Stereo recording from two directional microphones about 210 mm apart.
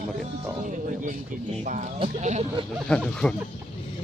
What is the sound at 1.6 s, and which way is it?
Speech, 35° right (ahead or behind).